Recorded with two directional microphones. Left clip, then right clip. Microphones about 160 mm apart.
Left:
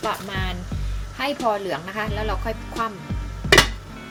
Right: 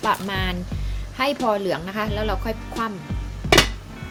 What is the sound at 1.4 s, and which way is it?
Speech, 30° right (ahead or behind).